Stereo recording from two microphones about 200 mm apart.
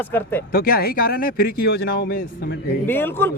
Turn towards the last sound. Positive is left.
turn(degrees=10)  # may be behind; listen again after turning